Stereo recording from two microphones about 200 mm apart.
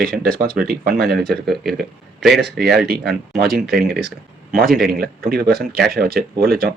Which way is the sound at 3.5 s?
50° right (ahead or behind).